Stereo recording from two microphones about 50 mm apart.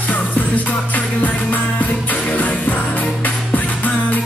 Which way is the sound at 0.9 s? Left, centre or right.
Left.